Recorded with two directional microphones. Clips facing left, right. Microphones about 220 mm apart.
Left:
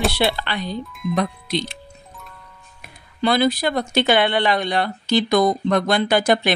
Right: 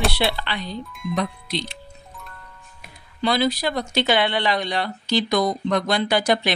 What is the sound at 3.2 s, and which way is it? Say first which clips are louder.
Speech: left 3 dB; 55° left (ahead or behind).